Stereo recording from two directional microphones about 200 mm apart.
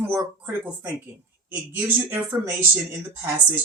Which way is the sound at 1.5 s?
10° right (ahead or behind).